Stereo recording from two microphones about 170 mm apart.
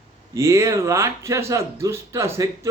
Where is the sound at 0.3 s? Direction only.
15° right (ahead or behind).